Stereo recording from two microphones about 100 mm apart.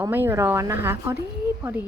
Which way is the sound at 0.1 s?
20° right (ahead or behind).